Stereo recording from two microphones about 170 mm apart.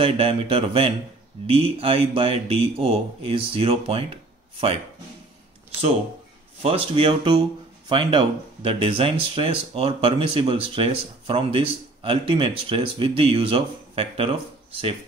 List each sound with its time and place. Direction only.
0.0 s speech: 35° right (ahead or behind)
6.6 s speech: 30° right (ahead or behind)